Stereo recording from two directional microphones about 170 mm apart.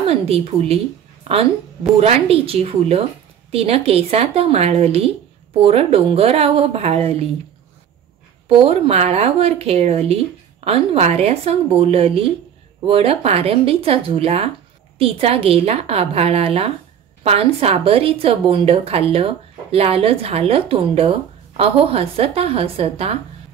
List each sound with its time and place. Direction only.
0.0 s speech: 35° right (ahead or behind)
8.5 s speech: 35° right (ahead or behind)